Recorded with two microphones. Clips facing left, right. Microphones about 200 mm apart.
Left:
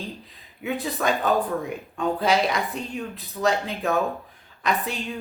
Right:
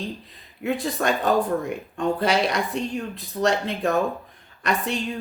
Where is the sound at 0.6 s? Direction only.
Centre (ahead or behind).